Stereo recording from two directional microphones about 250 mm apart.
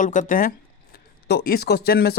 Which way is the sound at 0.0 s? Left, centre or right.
Left.